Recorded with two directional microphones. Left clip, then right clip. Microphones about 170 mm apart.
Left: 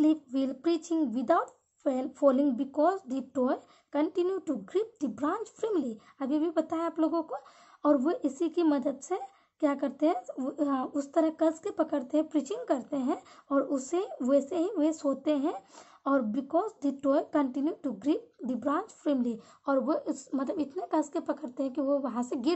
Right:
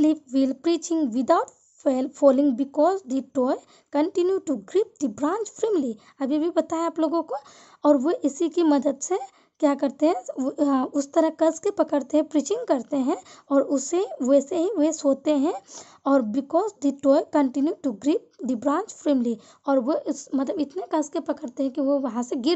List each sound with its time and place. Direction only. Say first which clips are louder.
0.0 s speech: right 6 dB; 45° right (ahead or behind)